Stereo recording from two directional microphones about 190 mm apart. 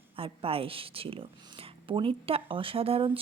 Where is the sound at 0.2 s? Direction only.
30° right (ahead or behind).